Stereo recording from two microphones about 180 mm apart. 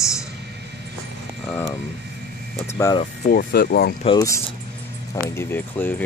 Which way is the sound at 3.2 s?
55° left (ahead or behind).